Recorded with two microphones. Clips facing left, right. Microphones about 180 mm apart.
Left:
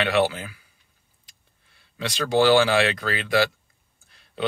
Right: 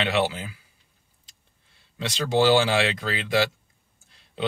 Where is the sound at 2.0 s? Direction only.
20° right (ahead or behind).